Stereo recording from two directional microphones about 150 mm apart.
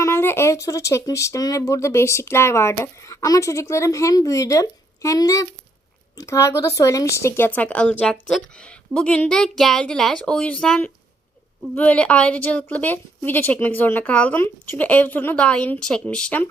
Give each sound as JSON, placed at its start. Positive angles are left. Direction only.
{"t": 0.0, "sound": "speech", "side_deg": 15}